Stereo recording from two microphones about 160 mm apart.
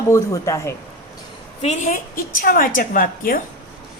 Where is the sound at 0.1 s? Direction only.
20° left (ahead or behind).